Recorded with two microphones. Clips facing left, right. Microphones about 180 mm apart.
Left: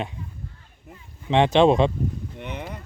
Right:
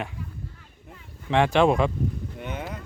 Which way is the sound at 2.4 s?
Centre (ahead or behind).